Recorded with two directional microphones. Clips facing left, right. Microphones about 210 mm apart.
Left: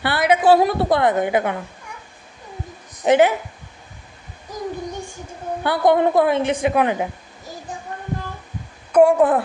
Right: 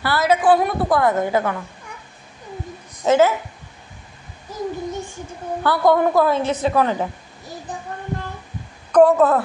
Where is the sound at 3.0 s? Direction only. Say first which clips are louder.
Left 1 dB; 15° left (ahead or behind).